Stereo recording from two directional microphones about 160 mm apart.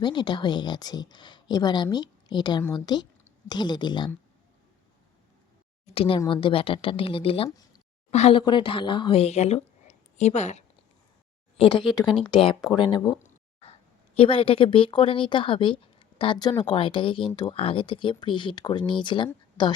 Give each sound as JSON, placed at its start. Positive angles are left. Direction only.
{"t": 0.0, "sound": "speech", "side_deg": 30}
{"t": 5.8, "sound": "a woman's voice", "side_deg": 35}
{"t": 8.4, "sound": "speech", "side_deg": 30}
{"t": 11.7, "sound": "speech", "side_deg": 0}
{"t": 12.6, "sound": "speech", "side_deg": 30}
{"t": 13.2, "sound": "a sound", "side_deg": 40}
{"t": 14.2, "sound": "a woman's voice", "side_deg": 35}